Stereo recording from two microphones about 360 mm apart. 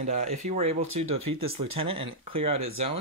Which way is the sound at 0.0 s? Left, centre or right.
Centre.